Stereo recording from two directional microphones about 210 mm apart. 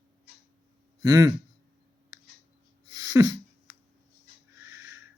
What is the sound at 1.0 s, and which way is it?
Speech, 15° right (ahead or behind).